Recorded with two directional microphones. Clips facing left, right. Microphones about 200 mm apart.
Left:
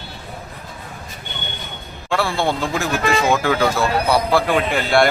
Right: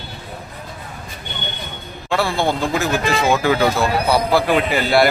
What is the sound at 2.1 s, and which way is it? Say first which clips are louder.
A man's voice: right 1 dB; centre (ahead or behind).